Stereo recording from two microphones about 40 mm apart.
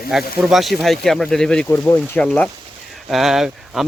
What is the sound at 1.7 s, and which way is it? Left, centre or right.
Speech, left.